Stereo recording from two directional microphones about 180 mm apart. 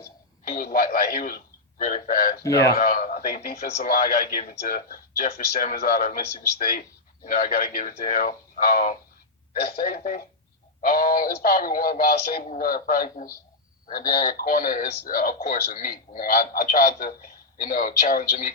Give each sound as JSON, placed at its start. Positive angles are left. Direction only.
{"t": 0.4, "sound": "a man's voice", "side_deg": 50}
{"t": 2.4, "sound": "a man's voice", "side_deg": 20}
{"t": 2.7, "sound": "speech", "side_deg": 50}